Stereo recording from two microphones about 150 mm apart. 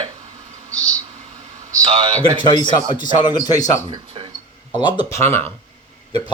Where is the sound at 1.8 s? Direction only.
40° right (ahead or behind).